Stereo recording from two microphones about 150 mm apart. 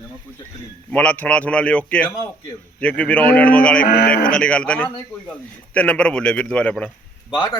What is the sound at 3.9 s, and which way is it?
Speech, 90° left.